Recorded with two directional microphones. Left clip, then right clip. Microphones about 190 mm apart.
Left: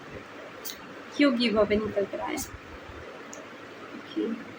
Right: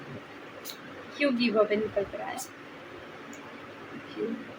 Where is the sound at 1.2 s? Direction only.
25° left (ahead or behind).